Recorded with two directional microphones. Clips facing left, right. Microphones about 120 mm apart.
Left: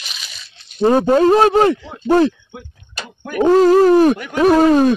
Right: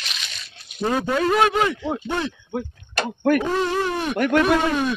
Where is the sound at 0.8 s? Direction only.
35° left (ahead or behind).